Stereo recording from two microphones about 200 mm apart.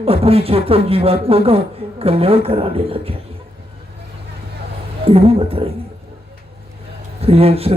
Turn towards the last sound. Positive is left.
turn(degrees=-30)  # may be behind; listen again after turning